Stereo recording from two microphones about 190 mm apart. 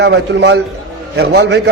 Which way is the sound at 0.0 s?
65° right (ahead or behind).